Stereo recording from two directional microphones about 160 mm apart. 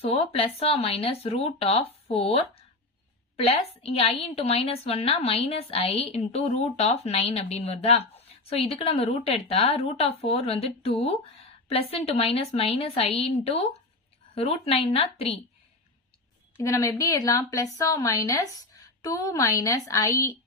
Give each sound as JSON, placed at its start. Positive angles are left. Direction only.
{"t": 0.0, "sound": "a woman's voice", "side_deg": 35}
{"t": 16.6, "sound": "a woman's voice", "side_deg": 20}